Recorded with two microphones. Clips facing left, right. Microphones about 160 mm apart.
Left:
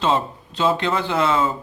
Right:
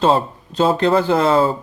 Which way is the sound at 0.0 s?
40° right (ahead or behind).